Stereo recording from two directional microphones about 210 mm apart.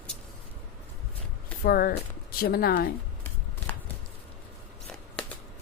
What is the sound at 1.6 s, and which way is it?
Speech, 45° left (ahead or behind).